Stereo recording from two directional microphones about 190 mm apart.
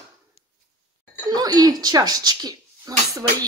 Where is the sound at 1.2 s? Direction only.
20° right (ahead or behind).